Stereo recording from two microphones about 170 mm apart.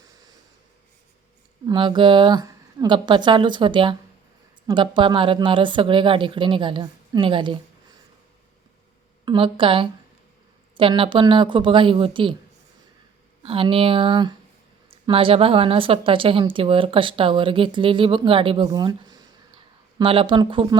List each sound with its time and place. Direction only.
1.6 s speech: 25° right (ahead or behind)
9.2 s speech: 30° right (ahead or behind)
13.4 s a woman's voice: 30° right (ahead or behind)